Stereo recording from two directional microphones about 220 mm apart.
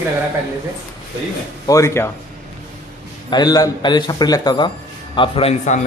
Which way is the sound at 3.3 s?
15° left (ahead or behind).